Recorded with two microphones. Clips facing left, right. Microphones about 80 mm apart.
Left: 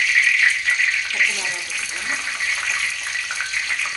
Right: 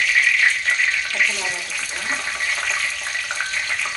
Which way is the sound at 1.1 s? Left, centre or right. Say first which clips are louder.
Even; centre.